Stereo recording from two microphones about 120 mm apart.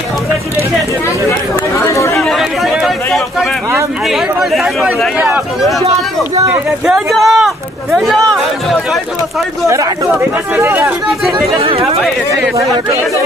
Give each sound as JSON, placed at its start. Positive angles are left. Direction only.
{"t": 1.9, "sound": "chatter", "side_deg": 25}
{"t": 2.1, "sound": "chatter", "side_deg": 0}
{"t": 4.1, "sound": "speech", "side_deg": 0}
{"t": 6.9, "sound": "speech", "side_deg": 0}
{"t": 10.6, "sound": "speech", "side_deg": -20}
{"t": 11.4, "sound": "speech", "side_deg": -50}